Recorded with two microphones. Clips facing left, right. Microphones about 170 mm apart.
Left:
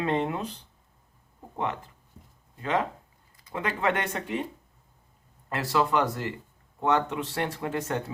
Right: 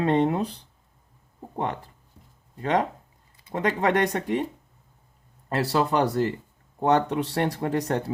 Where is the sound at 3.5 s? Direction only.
40° right (ahead or behind).